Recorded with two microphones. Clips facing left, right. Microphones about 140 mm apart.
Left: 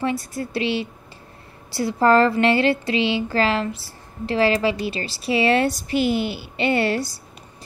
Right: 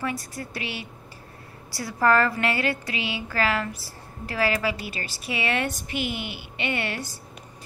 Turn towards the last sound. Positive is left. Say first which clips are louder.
# left 9 dB
turn(degrees=35)  # may be behind; listen again after turning